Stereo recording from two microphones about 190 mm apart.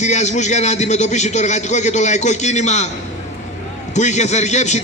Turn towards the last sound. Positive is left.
turn(degrees=40)  # may be behind; listen again after turning